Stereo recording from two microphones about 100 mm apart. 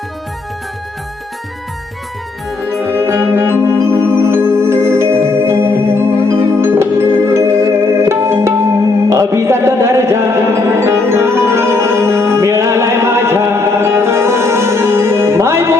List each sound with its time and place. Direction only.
2.8 s music: 25° right (ahead or behind)